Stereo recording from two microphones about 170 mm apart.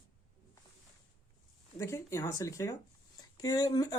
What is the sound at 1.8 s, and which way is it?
Speech, 15° left (ahead or behind).